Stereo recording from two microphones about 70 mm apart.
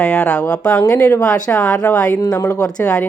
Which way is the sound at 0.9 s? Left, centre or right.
Left.